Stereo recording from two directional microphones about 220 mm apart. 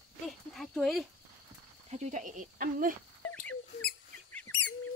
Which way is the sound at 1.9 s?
30° right (ahead or behind).